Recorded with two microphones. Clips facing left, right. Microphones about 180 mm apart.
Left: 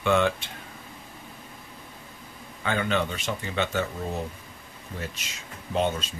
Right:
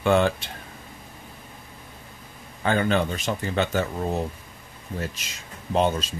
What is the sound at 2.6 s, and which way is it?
Speech, 40° right (ahead or behind).